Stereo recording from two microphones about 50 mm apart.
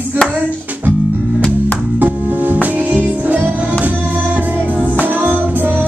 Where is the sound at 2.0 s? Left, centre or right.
Right.